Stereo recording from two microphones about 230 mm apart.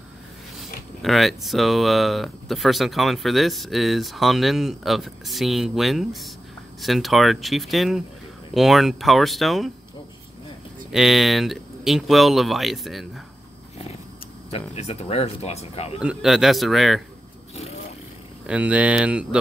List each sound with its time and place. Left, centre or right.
0.6 s speech: centre
10.9 s speech: centre
14.5 s speech: left
16.0 s speech: centre
18.5 s speech: centre